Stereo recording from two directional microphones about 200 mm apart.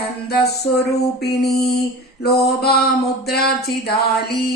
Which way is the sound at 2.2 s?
55° left (ahead or behind).